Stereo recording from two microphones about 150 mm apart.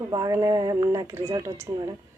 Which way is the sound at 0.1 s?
20° right (ahead or behind).